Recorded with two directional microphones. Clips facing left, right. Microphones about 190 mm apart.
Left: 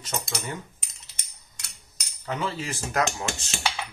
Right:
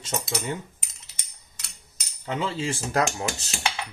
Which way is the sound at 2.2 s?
25° right (ahead or behind).